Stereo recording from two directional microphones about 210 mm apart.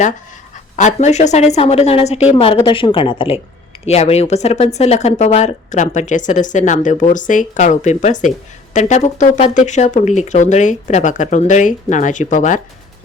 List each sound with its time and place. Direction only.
0.8 s speech: 35° left (ahead or behind)